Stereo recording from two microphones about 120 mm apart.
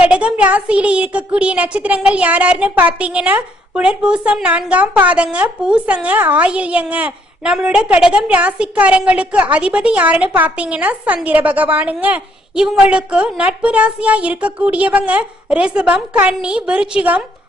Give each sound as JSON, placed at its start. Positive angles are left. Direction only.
{"t": 0.0, "sound": "a woman's voice", "side_deg": -10}